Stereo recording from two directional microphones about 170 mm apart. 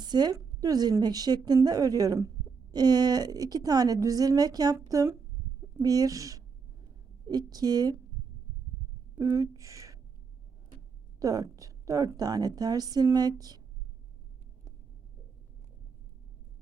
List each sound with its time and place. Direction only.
0.0 s a woman's voice: 25° right (ahead or behind)
9.1 s speech: 20° right (ahead or behind)
11.2 s a woman's voice: 20° right (ahead or behind)